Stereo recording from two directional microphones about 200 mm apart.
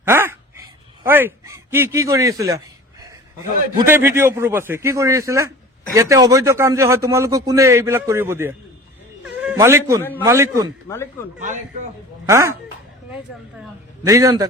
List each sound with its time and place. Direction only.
0.0 s a sound: 10° right (ahead or behind)
1.0 s a man's voice: 10° right (ahead or behind)
3.8 s a man's voice: 10° right (ahead or behind)
9.2 s cat: 5° right (ahead or behind)
10.0 s a man's voice: 10° left (ahead or behind)
10.2 s a man's voice: 15° right (ahead or behind)
10.8 s speech: 15° left (ahead or behind)
11.3 s a man's voice: 40° right (ahead or behind)
12.2 s a man's voice: 15° right (ahead or behind)
14.0 s a man's voice: 15° right (ahead or behind)